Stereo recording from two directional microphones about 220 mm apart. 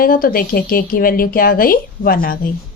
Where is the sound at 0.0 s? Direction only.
40° left (ahead or behind).